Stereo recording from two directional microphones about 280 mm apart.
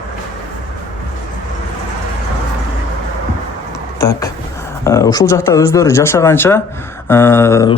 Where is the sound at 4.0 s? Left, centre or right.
Centre.